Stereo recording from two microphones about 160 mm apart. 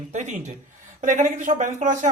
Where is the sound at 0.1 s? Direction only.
50° right (ahead or behind).